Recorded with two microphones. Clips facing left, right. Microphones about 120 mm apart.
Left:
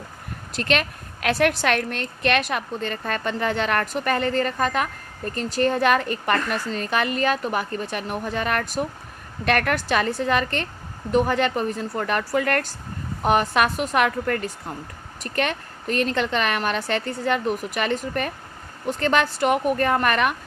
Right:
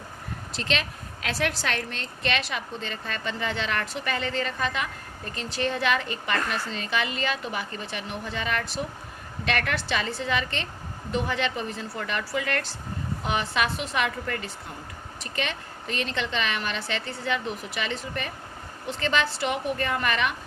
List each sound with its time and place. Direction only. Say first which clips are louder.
0.5 s a woman's voice: left 6 dB; 55° left (ahead or behind)